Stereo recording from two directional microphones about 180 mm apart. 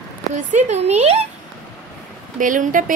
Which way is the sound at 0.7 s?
40° right (ahead or behind).